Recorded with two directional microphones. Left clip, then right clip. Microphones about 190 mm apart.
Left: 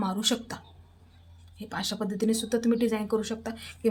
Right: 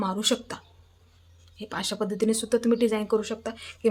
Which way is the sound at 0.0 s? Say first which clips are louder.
Right 2 dB; 15° right (ahead or behind).